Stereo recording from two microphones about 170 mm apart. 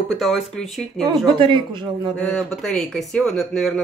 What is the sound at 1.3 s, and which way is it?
Speech, 30° right (ahead or behind).